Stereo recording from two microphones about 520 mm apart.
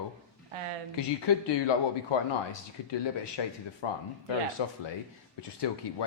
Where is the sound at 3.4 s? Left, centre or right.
Left.